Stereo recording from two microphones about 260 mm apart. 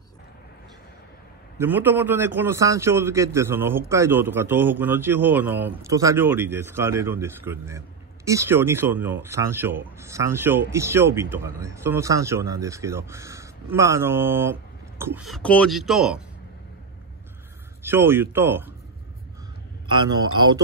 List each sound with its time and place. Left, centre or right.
1.6 s speech: centre
17.8 s speech: centre
20.3 s speech: centre